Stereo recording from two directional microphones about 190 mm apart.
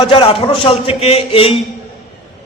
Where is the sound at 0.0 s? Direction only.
30° left (ahead or behind).